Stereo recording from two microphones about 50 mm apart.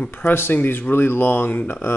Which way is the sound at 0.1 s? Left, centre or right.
Left.